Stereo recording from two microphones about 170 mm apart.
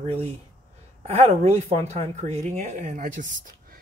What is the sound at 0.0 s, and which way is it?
Speech, 35° right (ahead or behind).